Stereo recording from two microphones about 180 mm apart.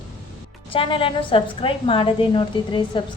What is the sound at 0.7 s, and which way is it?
A woman's voice, 30° left (ahead or behind).